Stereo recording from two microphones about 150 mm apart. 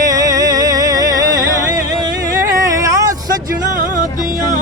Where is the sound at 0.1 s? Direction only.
25° right (ahead or behind).